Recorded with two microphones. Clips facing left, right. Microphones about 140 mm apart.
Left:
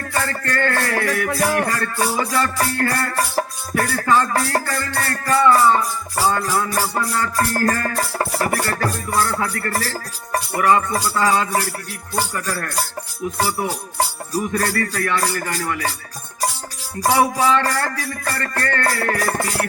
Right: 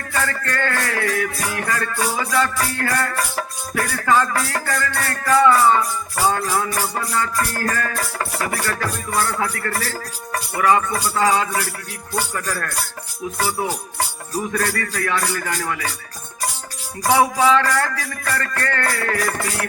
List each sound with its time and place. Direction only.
0.1 s music: 35° left (ahead or behind)
14.5 s music: 35° left (ahead or behind)
17.6 s music: 35° left (ahead or behind)